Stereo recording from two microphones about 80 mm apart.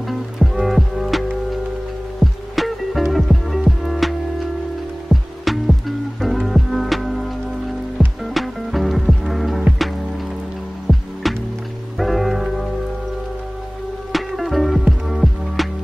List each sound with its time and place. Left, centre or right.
0.4 s music: centre
5.1 s music: centre
11.3 s music: centre
14.1 s music: centre